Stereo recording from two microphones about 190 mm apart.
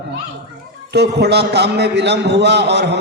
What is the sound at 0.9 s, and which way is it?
A man's voice, 60° right (ahead or behind).